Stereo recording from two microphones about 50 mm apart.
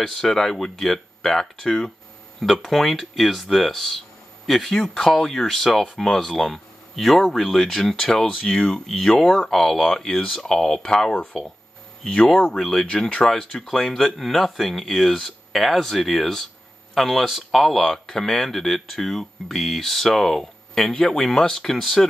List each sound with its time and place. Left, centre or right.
0.0 s speech: centre
4.7 s speech: centre
8.8 s speech: centre
12.1 s speech: left
12.5 s speech: centre
21.7 s speech: centre